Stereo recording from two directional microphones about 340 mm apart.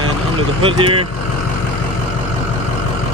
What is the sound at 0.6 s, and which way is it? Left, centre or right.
Speech, centre.